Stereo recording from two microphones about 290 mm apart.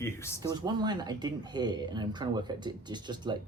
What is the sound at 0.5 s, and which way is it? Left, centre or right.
Speech, centre.